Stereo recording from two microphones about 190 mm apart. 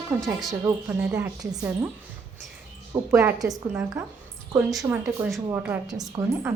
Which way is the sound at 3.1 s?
15° right (ahead or behind).